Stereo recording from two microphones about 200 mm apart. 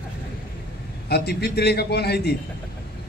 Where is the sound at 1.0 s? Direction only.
55° left (ahead or behind).